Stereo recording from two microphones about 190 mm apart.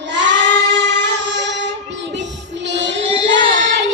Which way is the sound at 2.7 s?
70° right (ahead or behind).